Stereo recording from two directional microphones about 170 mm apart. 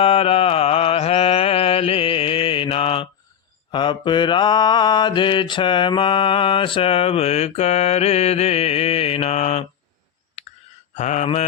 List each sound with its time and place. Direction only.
0.0 s mantra: 35° left (ahead or behind)
10.9 s mantra: 45° left (ahead or behind)